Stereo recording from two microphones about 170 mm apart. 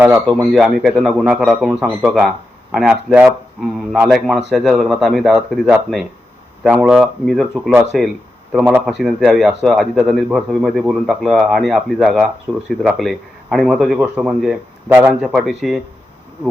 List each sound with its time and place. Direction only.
0.3 s speech: 10° left (ahead or behind)
0.6 s speech: centre (ahead or behind)
8.6 s a man's voice: 10° right (ahead or behind)
15.3 s speech: centre (ahead or behind)